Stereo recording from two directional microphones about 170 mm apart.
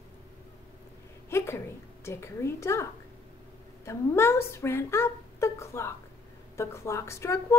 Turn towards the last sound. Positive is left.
turn(degrees=15)  # may be behind; listen again after turning